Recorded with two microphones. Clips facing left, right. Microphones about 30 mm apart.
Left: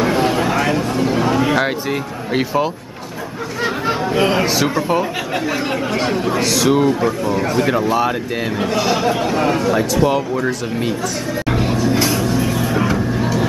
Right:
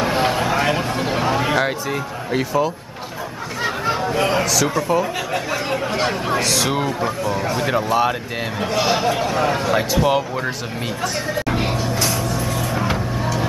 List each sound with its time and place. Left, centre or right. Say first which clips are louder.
0.1 s vehicle: left 2 dB; centre
0.6 s a sound: left 2 dB; centre
2.3 s speech: left 2 dB; left
3.6 s chatter: left 2 dB; centre
4.6 s speech: left 2 dB; left
5.5 s speech: left 2 dB; centre
8.1 s speech: left 4 dB; centre
8.7 s speech: even; centre
9.6 s speech: left 3 dB; centre
11.5 s a sound: left 4 dB; centre
12.0 s vehicle: left 4 dB; centre
13.2 s a sound: left 4 dB; centre